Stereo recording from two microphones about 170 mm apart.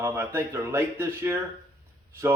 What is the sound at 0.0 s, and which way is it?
Speech, 15° right (ahead or behind).